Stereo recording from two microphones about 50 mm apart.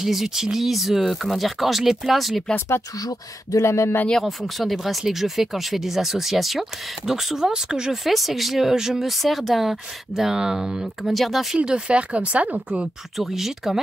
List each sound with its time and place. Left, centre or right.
0.0 s speech: centre
3.5 s speech: left
4.2 s speech: centre
7.9 s speech: centre
9.2 s speech: centre
11.5 s speech: right
13.2 s speech: centre